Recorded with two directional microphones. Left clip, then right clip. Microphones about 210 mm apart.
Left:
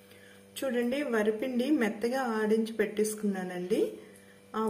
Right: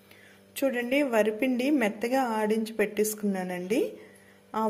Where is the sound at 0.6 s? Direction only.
35° right (ahead or behind).